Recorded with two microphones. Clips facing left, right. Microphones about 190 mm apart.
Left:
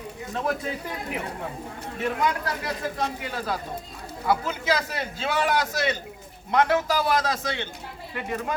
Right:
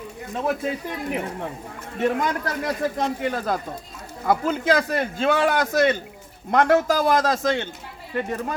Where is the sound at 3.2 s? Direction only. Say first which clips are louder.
Right 5 dB; 50° right (ahead or behind).